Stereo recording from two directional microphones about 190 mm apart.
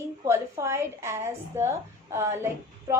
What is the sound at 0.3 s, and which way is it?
A woman's voice, 15° right (ahead or behind).